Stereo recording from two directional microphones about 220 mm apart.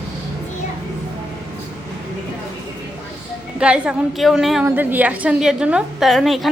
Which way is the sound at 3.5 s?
5° right (ahead or behind).